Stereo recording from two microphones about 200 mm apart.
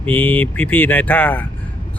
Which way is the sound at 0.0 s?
10° left (ahead or behind).